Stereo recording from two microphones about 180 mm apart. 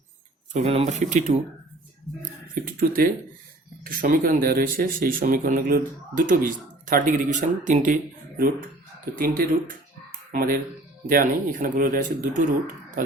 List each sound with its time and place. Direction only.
0.5 s speech: 35° right (ahead or behind)
2.6 s speech: 50° right (ahead or behind)
9.1 s speech: 50° right (ahead or behind)